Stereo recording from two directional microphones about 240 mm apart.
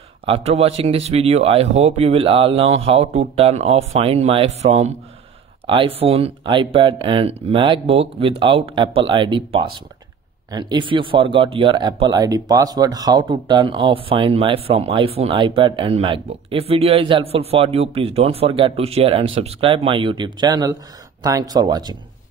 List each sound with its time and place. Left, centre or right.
0.2 s speech: right